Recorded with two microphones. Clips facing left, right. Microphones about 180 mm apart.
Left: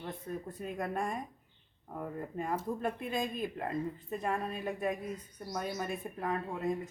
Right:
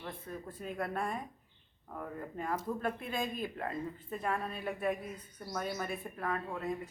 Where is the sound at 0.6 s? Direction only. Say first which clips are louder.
Even; 10° left (ahead or behind).